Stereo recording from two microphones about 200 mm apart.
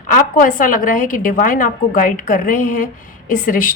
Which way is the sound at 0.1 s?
45° left (ahead or behind).